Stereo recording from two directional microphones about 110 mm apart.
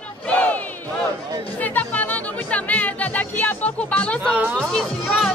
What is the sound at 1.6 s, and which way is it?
Music, 15° left (ahead or behind).